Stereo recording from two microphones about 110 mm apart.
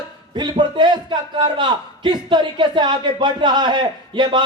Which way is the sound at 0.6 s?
40° right (ahead or behind).